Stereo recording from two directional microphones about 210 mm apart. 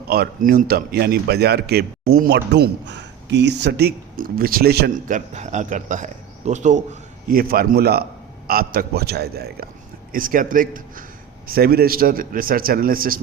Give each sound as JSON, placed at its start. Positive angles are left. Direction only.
{"t": 0.1, "sound": "speech", "side_deg": -45}
{"t": 7.3, "sound": "a man's voice", "side_deg": -45}